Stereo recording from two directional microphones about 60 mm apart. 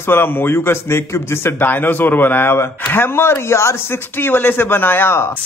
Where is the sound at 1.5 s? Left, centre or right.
Left.